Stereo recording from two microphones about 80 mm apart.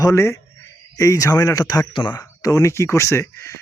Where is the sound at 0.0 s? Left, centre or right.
Left.